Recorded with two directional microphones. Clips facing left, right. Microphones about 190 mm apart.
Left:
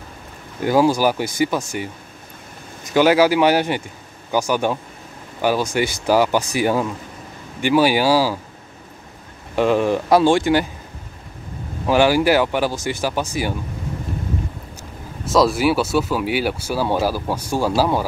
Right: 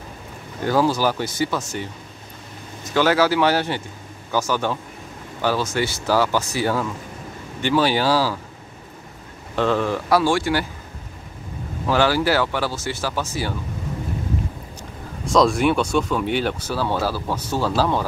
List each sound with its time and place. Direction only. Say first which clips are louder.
0.7 s speech: left 3 dB; 15° left (ahead or behind)
9.6 s speech: left 4 dB; 15° left (ahead or behind)
11.9 s speech: left 4 dB; 15° left (ahead or behind)
14.8 s speech: right 2 dB; 5° left (ahead or behind)